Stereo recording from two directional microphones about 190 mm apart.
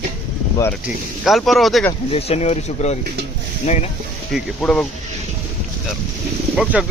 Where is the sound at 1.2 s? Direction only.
Centre (ahead or behind).